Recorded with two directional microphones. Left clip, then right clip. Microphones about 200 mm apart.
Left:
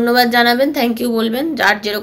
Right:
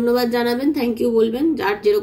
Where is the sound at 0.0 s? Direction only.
5° right (ahead or behind).